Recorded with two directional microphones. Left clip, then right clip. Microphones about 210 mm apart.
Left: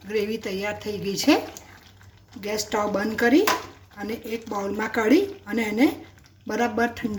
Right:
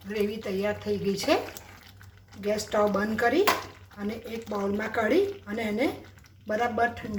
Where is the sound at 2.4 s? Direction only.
45° left (ahead or behind).